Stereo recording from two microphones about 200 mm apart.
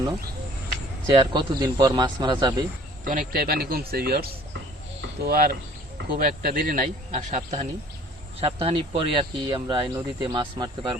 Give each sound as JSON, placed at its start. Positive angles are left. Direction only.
{"t": 1.1, "sound": "speech", "side_deg": -20}
{"t": 3.1, "sound": "a man's voice", "side_deg": -45}